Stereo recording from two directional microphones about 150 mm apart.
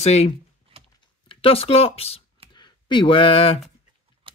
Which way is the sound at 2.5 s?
30° left (ahead or behind).